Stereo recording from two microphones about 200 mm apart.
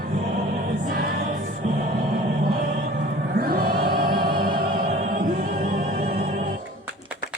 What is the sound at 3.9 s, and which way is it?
Music, 45° right (ahead or behind).